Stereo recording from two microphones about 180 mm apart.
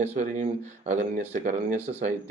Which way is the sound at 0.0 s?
45° right (ahead or behind).